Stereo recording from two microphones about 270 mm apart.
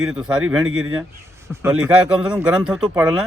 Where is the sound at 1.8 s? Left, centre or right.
Centre.